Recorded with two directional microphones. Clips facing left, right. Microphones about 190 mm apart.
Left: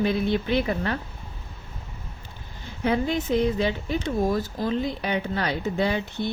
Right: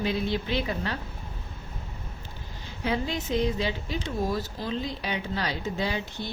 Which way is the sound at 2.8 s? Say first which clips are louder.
Left 5 dB; 55° left (ahead or behind).